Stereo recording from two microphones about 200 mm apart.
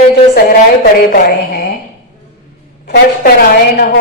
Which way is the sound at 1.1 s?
45° left (ahead or behind).